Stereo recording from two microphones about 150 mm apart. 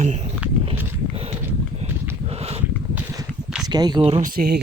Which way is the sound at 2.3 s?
40° right (ahead or behind).